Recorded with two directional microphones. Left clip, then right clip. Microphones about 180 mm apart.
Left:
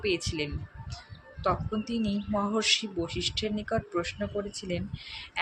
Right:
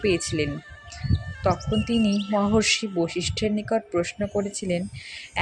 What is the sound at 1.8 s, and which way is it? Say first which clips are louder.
Speech: right 8 dB; 40° right (ahead or behind).